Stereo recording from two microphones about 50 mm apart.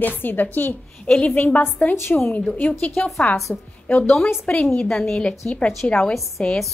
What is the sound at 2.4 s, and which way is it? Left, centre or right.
Speech, left.